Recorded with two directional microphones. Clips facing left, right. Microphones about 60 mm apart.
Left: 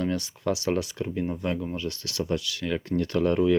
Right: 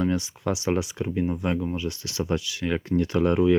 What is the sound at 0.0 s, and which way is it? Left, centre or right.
Speech, centre.